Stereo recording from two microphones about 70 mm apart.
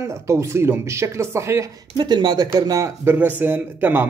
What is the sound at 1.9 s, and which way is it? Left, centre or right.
Speech, right.